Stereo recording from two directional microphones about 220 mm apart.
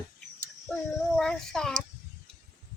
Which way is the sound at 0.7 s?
5° left (ahead or behind).